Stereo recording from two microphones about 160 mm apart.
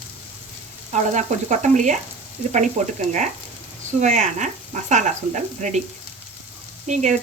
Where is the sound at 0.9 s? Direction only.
50° right (ahead or behind).